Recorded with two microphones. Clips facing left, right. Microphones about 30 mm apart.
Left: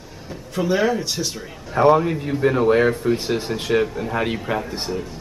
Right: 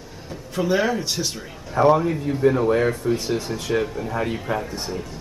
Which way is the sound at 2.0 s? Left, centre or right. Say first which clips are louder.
Left 1 dB; left.